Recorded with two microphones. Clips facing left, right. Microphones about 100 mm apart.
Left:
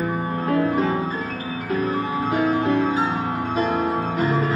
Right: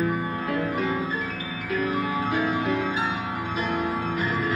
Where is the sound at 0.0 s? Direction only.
35° left (ahead or behind).